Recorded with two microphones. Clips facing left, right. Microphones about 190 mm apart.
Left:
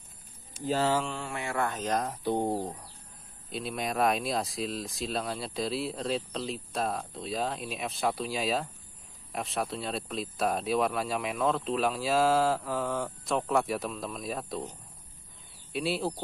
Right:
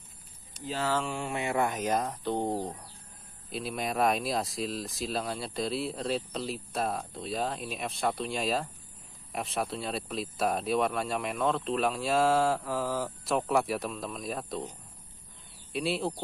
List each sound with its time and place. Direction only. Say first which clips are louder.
1.1 s speech: right 3 dB; 20° right (ahead or behind)
2.2 s speech: left 1 dB; 10° left (ahead or behind)
15.7 s speech: even; centre (ahead or behind)